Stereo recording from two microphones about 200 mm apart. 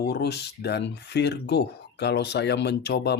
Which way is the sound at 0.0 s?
55° left (ahead or behind).